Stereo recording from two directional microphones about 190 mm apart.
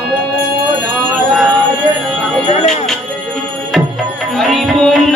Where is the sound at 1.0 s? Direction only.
Centre (ahead or behind).